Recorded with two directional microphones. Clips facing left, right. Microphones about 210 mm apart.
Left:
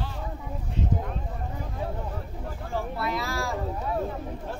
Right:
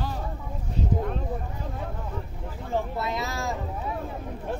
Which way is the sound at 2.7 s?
20° right (ahead or behind).